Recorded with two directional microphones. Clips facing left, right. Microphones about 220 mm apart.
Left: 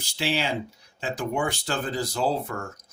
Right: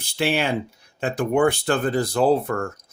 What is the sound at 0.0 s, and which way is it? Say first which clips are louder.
Speech: right 5 dB; 55° right (ahead or behind).